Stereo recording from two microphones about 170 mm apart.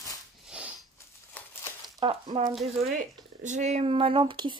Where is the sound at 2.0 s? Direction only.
30° right (ahead or behind).